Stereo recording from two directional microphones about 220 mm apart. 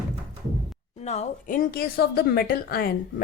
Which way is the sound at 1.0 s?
30° left (ahead or behind).